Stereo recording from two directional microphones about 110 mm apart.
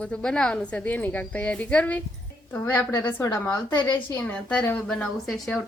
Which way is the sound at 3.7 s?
40° left (ahead or behind).